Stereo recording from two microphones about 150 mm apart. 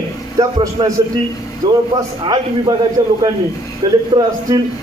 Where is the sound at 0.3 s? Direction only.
20° right (ahead or behind).